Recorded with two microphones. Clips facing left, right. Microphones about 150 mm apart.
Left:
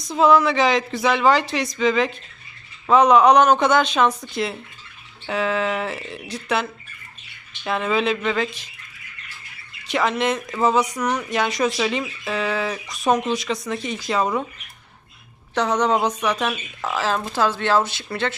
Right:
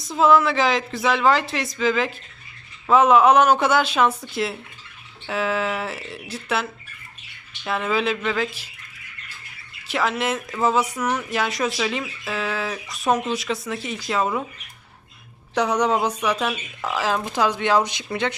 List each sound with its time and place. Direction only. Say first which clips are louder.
0.0 s speech: left 1 dB; centre (ahead or behind)
9.8 s speech: left 2 dB; 5° right (ahead or behind)
15.5 s speech: left 1 dB; 10° right (ahead or behind)